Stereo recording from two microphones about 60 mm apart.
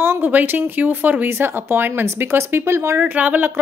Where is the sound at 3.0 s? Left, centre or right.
Right.